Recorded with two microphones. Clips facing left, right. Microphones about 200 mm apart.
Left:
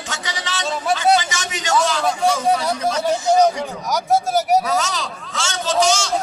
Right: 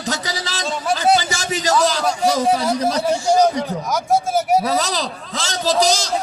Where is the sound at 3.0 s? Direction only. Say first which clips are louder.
Left 2 dB; centre (ahead or behind).